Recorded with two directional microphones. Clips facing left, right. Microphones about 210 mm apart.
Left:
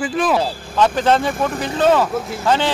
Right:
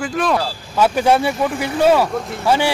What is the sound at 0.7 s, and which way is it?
Speech, 10° right (ahead or behind).